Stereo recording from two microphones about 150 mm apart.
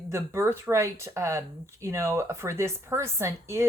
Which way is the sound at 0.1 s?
15° right (ahead or behind).